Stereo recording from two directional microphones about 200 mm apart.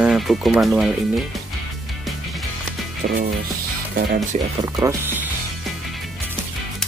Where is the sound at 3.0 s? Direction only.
45° right (ahead or behind).